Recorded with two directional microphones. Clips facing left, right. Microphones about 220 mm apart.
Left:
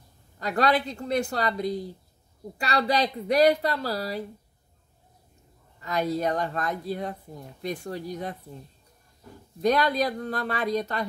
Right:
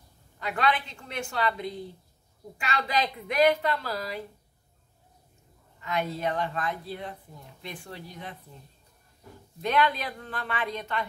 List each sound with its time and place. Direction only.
0.4 s a woman's voice: 40° left (ahead or behind)
5.8 s a woman's voice: 40° left (ahead or behind)
9.6 s a woman's voice: 40° left (ahead or behind)